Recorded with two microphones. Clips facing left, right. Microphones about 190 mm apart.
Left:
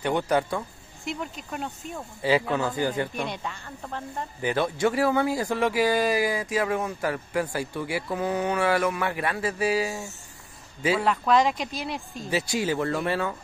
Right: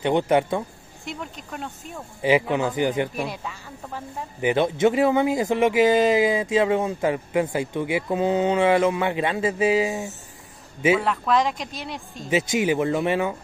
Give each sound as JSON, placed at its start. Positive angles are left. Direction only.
{"t": 0.0, "sound": "speech", "side_deg": -20}
{"t": 1.0, "sound": "speech", "side_deg": 0}
{"t": 2.2, "sound": "speech", "side_deg": -20}
{"t": 3.2, "sound": "speech", "side_deg": -5}
{"t": 4.4, "sound": "speech", "side_deg": -20}
{"t": 11.0, "sound": "speech", "side_deg": 0}
{"t": 12.3, "sound": "speech", "side_deg": -20}